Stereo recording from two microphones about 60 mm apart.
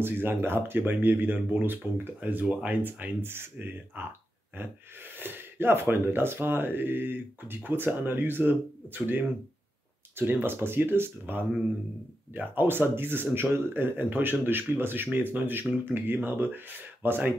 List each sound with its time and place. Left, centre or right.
0.0 s speech: right